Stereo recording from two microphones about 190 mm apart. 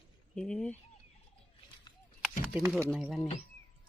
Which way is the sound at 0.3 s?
5° left (ahead or behind).